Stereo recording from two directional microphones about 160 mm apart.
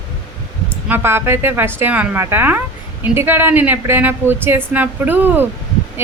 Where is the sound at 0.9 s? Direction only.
15° right (ahead or behind).